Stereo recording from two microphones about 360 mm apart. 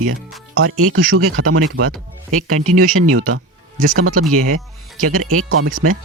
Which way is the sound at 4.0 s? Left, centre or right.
Right.